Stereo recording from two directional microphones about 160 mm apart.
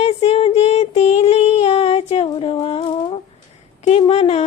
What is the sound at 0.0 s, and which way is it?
Female singing, 40° left (ahead or behind).